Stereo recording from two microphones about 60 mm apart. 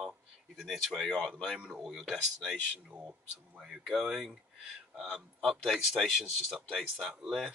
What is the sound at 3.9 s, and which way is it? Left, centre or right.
Speech, centre.